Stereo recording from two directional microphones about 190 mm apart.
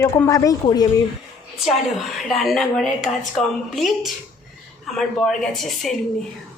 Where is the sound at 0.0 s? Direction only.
15° left (ahead or behind).